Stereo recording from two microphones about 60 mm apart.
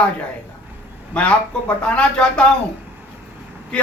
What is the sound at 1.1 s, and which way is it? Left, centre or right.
Speech, centre.